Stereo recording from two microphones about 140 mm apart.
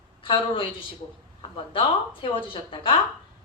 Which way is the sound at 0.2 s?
40° left (ahead or behind).